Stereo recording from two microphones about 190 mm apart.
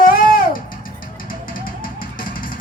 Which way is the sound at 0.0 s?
50° left (ahead or behind).